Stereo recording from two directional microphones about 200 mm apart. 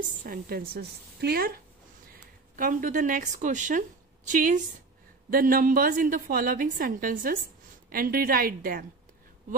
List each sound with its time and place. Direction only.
0.0 s a woman's voice: 45° right (ahead or behind)